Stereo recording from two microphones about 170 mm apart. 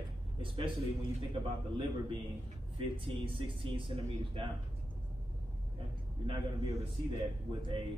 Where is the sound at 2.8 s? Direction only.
30° right (ahead or behind).